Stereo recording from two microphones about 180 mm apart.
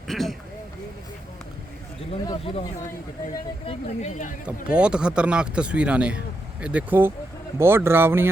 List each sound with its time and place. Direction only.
0.1 s a sound: centre (ahead or behind)
2.2 s speech: 25° left (ahead or behind)
3.7 s speech: 40° left (ahead or behind)
4.4 s speech: 5° right (ahead or behind)